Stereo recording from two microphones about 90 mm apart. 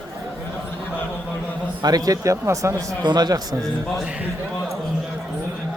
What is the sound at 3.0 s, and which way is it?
Speech, 50° right (ahead or behind).